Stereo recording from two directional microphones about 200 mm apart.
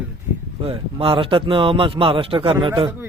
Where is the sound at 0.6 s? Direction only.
25° right (ahead or behind).